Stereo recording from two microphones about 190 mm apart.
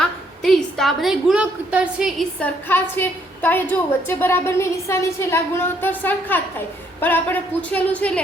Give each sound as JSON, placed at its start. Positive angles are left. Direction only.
{"t": 0.0, "sound": "a woman's voice", "side_deg": 0}